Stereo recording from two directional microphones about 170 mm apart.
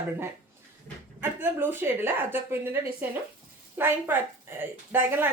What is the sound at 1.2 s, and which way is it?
A woman's voice, 10° right (ahead or behind).